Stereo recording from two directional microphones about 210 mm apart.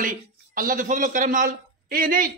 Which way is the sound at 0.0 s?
40° right (ahead or behind).